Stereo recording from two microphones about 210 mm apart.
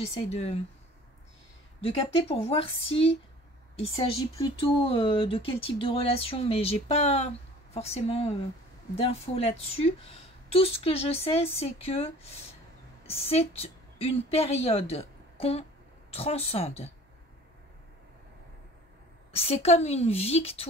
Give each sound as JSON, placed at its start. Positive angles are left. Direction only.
{"t": 0.0, "sound": "a woman's voice", "side_deg": 30}
{"t": 1.8, "sound": "a woman's voice", "side_deg": 25}
{"t": 19.3, "sound": "a woman's voice", "side_deg": 30}